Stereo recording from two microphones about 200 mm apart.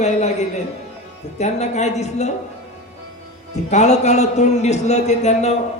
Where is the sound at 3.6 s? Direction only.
35° left (ahead or behind).